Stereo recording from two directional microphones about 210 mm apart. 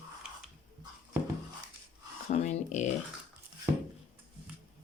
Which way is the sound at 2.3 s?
35° left (ahead or behind).